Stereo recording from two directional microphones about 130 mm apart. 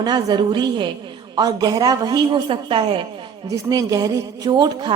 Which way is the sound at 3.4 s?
25° right (ahead or behind).